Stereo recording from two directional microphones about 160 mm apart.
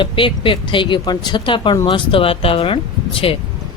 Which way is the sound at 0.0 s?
30° left (ahead or behind).